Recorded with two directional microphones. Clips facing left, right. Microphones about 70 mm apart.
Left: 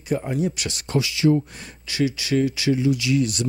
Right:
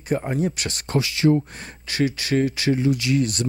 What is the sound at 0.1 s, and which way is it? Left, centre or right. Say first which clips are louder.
Speech: right 1 dB; right.